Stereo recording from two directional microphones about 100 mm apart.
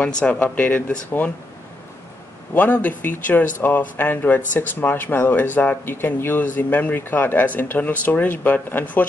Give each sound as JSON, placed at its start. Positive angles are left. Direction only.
{"t": 0.0, "sound": "speech", "side_deg": 15}
{"t": 2.5, "sound": "speech", "side_deg": 15}